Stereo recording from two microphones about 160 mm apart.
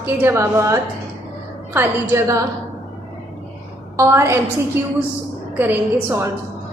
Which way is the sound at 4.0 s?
15° right (ahead or behind).